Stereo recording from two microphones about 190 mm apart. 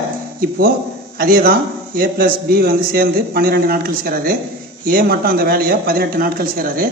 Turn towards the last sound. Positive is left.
turn(degrees=-50)  # may be behind; listen again after turning